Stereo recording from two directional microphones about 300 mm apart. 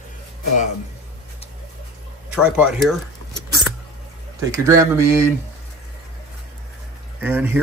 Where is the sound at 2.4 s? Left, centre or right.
Centre.